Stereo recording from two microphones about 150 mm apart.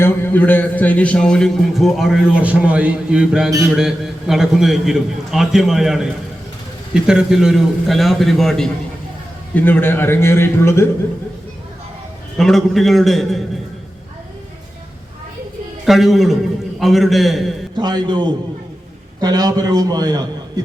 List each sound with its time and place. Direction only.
0.0 s a man's voice: 15° left (ahead or behind)
12.4 s a man's voice: centre (ahead or behind)
15.9 s a man's voice: centre (ahead or behind)
17.7 s a man's voice: 30° right (ahead or behind)